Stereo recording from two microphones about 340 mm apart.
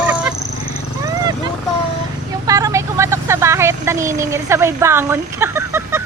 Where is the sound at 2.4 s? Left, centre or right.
Centre.